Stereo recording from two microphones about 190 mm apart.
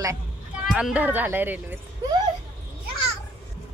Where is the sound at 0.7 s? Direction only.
5° right (ahead or behind).